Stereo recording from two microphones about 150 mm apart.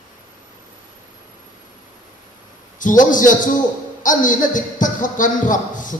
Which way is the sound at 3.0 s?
60° left (ahead or behind).